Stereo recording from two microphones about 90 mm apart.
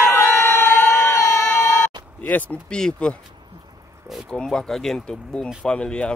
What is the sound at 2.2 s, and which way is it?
Speech, 20° left (ahead or behind).